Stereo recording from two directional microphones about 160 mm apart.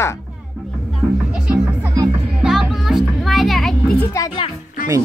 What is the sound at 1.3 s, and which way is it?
Music, 5° right (ahead or behind).